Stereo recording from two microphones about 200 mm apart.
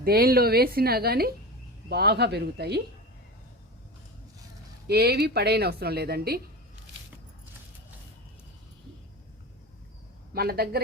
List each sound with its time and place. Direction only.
0.0 s a woman's voice: 50° right (ahead or behind)
4.9 s a woman's voice: 55° right (ahead or behind)
10.3 s a woman's voice: 50° right (ahead or behind)